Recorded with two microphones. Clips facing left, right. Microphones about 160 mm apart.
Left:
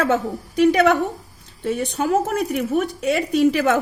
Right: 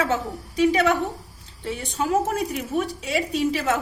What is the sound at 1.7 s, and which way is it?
Speech, 60° left (ahead or behind).